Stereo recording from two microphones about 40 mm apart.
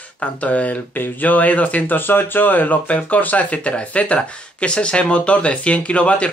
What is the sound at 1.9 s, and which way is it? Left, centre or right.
Speech, left.